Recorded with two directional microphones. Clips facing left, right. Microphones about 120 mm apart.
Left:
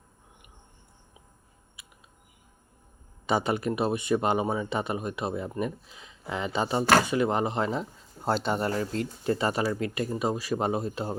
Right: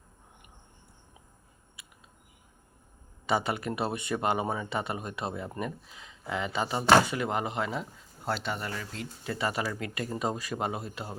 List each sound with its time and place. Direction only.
3.2 s speech: 20° left (ahead or behind); by 9.4 s 40° left (ahead or behind)
9.4 s speech: 30° left (ahead or behind)
10.6 s speech: 25° left (ahead or behind)